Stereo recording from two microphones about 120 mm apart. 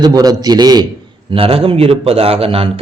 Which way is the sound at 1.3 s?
50° right (ahead or behind).